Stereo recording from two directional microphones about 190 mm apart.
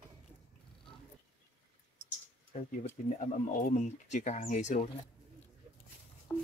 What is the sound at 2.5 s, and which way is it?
Speech, 35° left (ahead or behind).